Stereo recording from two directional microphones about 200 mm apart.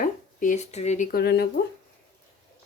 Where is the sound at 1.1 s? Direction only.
50° left (ahead or behind).